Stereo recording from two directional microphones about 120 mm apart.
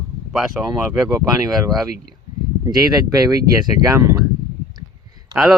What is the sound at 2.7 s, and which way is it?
Speech, 30° right (ahead or behind).